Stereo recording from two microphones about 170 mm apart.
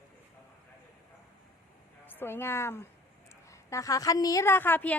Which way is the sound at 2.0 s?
10° left (ahead or behind).